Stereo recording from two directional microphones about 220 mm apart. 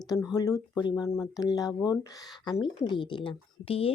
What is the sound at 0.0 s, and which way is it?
Speech, 15° left (ahead or behind).